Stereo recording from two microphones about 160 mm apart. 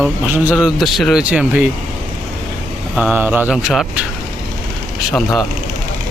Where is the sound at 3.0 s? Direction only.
10° right (ahead or behind).